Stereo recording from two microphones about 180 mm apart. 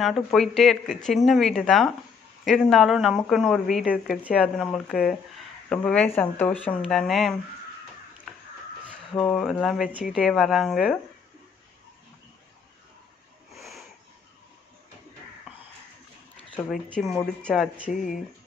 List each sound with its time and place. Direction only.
0.0 s speech: centre (ahead or behind)
9.2 s speech: 5° left (ahead or behind)
13.6 s sniff: centre (ahead or behind)
16.5 s speech: 5° left (ahead or behind)
17.9 s speech: 50° left (ahead or behind)